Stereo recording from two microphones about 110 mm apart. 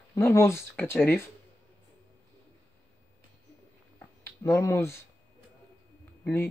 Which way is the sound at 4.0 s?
20° left (ahead or behind).